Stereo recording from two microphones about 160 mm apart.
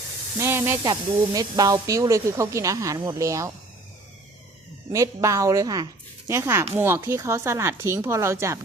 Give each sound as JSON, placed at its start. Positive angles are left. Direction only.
{"t": 0.3, "sound": "speech", "side_deg": -15}
{"t": 4.9, "sound": "speech", "side_deg": -20}